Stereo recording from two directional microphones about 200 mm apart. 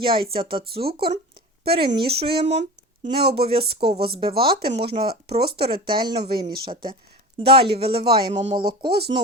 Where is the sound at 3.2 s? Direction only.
50° right (ahead or behind).